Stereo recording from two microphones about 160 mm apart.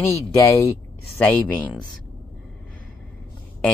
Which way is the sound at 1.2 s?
10° left (ahead or behind).